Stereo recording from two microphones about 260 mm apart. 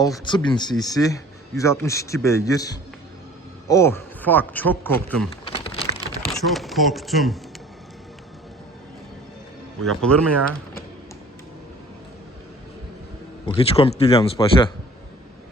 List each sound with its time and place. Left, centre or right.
0.3 s a man's voice: centre
5.5 s a sound: left
6.3 s speech: centre
9.8 s speech: centre
13.4 s a man's voice: left